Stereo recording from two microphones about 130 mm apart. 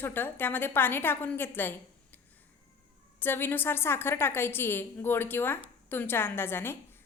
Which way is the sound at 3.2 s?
15° left (ahead or behind).